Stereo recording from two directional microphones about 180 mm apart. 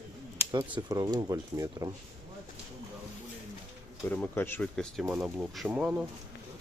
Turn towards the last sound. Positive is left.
turn(degrees=-5)  # may be behind; listen again after turning